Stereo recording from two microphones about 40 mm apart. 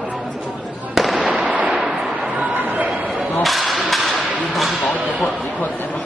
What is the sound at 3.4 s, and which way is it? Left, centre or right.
Whip, centre.